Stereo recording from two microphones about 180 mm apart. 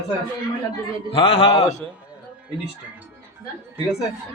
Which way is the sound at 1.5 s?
15° left (ahead or behind).